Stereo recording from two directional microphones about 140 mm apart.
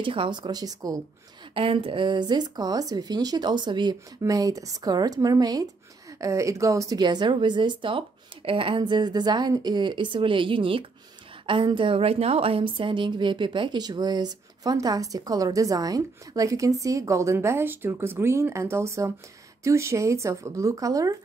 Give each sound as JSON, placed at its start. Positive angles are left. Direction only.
{"t": 0.0, "sound": "speech", "side_deg": -35}
{"t": 1.5, "sound": "a woman's voice", "side_deg": -40}